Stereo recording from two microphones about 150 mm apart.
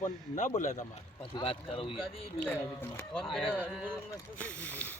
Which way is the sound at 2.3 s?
10° left (ahead or behind).